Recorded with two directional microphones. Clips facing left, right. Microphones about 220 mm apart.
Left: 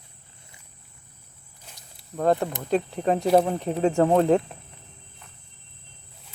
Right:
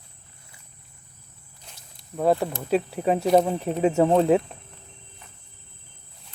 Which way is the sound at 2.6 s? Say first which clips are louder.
Right 1 dB; 5° right (ahead or behind).